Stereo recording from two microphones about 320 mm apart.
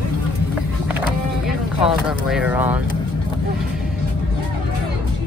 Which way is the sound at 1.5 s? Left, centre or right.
Centre.